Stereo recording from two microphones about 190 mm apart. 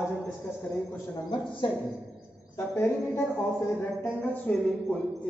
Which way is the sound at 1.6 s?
25° left (ahead or behind).